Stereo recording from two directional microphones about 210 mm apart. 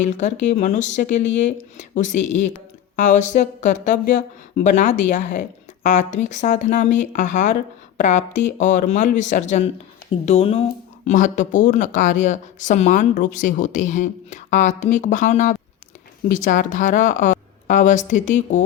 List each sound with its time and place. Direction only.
0.0 s speech: 35° left (ahead or behind)